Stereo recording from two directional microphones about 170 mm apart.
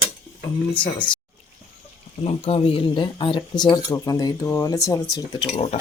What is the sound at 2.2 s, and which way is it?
Speech, 35° left (ahead or behind).